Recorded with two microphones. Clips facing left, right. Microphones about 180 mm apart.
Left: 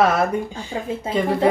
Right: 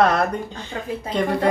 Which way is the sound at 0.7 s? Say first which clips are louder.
Left 3 dB; 20° left (ahead or behind).